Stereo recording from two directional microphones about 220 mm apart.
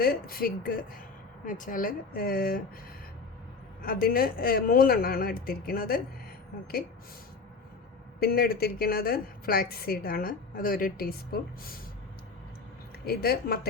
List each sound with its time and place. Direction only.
0.0 s a woman's voice: 45° left (ahead or behind)
3.8 s a woman's voice: 40° left (ahead or behind)
8.2 s a woman's voice: 45° left (ahead or behind)
13.1 s a woman's voice: 45° left (ahead or behind)